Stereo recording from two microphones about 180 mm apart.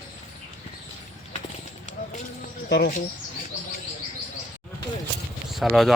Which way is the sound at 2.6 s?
70° left (ahead or behind).